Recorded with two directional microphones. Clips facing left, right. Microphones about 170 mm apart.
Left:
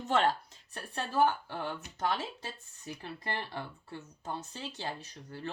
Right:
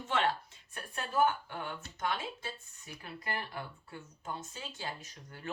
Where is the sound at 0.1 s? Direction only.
40° left (ahead or behind).